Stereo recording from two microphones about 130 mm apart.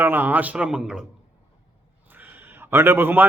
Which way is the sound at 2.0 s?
15° right (ahead or behind).